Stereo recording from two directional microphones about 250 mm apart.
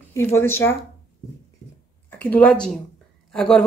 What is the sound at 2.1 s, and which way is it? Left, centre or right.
A woman's voice, centre.